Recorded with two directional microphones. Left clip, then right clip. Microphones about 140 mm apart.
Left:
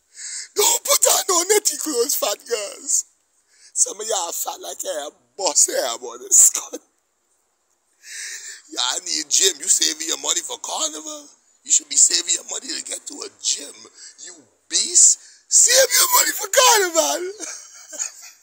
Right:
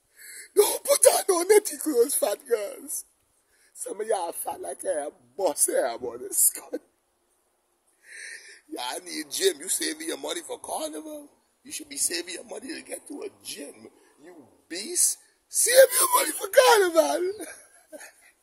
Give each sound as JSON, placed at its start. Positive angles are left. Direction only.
{"t": 0.1, "sound": "a sound", "side_deg": -20}
{"t": 3.5, "sound": "a man's voice", "side_deg": -25}
{"t": 5.7, "sound": "speech", "side_deg": 0}
{"t": 6.0, "sound": "speech", "side_deg": -15}
{"t": 8.0, "sound": "speech", "side_deg": -15}
{"t": 16.1, "sound": "speech", "side_deg": -5}